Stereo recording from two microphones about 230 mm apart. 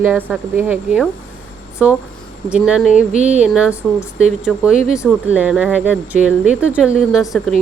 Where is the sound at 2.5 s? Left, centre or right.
Centre.